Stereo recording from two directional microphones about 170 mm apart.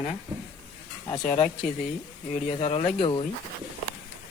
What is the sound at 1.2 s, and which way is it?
Speech, 45° left (ahead or behind).